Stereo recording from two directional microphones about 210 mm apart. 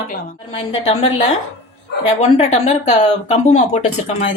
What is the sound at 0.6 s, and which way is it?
Speech, 30° left (ahead or behind).